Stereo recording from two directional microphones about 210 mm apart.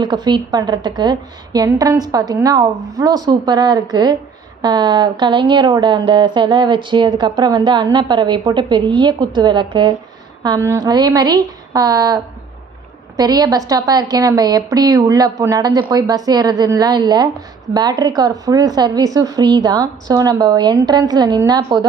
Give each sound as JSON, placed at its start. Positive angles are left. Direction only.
{"t": 0.0, "sound": "a woman's voice", "side_deg": -20}